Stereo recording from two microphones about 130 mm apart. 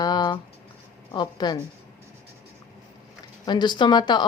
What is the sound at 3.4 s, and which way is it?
Speech, 35° left (ahead or behind).